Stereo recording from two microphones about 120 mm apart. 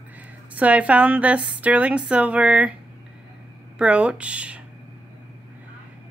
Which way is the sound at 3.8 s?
10° right (ahead or behind).